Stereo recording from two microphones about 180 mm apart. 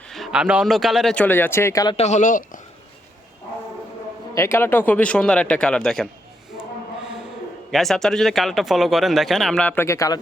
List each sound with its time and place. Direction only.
0.1 s speech: centre (ahead or behind); by 2.0 s 20° left (ahead or behind)
2.0 s speech: 40° left (ahead or behind)
4.4 s a man's voice: 15° left (ahead or behind)
7.7 s speech: centre (ahead or behind); by 10.2 s 15° left (ahead or behind)